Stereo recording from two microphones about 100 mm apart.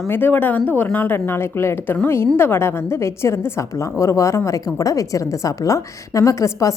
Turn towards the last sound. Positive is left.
turn(degrees=30)  # may be behind; listen again after turning